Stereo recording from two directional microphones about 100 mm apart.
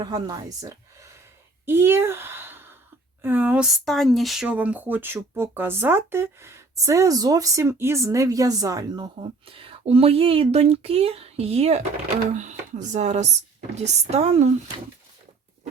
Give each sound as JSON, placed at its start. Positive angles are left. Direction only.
{"t": 0.0, "sound": "speech", "side_deg": -40}
{"t": 1.6, "sound": "speech", "side_deg": -25}
{"t": 3.8, "sound": "speech", "side_deg": 0}
{"t": 9.5, "sound": "speech", "side_deg": -65}
{"t": 12.9, "sound": "speech", "side_deg": -90}